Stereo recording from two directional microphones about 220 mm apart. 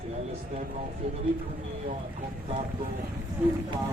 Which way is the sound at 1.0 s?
30° right (ahead or behind).